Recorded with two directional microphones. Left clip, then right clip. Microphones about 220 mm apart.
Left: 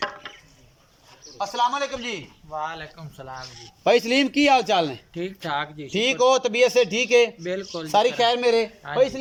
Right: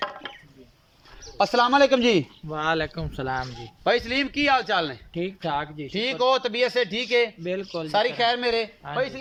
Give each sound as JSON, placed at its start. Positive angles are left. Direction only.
{"t": 1.4, "sound": "a man's voice", "side_deg": -50}
{"t": 3.8, "sound": "a man's voice", "side_deg": 10}
{"t": 5.5, "sound": "speech", "side_deg": -5}
{"t": 5.9, "sound": "a man's voice", "side_deg": 10}
{"t": 7.4, "sound": "speech", "side_deg": -5}
{"t": 7.9, "sound": "a man's voice", "side_deg": 10}